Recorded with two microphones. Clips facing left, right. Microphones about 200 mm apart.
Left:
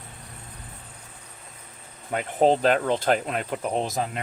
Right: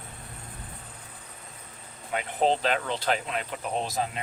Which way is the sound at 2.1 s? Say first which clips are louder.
Left 5 dB; 45° left (ahead or behind).